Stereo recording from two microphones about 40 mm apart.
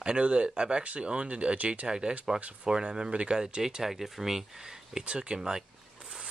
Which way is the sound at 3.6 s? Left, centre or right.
Centre.